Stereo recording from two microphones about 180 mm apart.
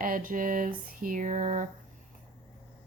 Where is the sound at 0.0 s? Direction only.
50° right (ahead or behind).